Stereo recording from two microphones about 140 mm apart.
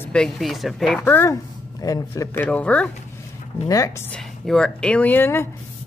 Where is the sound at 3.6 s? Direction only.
25° left (ahead or behind).